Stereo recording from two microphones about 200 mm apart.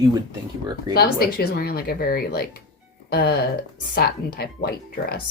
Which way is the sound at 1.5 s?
50° left (ahead or behind).